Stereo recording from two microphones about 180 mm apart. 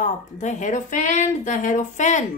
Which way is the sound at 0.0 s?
45° left (ahead or behind).